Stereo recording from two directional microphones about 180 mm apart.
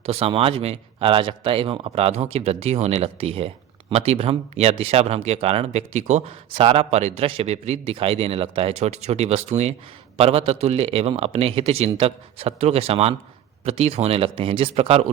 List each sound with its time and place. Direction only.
0.0 s speech: 30° right (ahead or behind)